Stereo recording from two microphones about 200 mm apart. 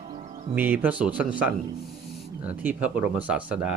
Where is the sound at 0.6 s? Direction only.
10° right (ahead or behind).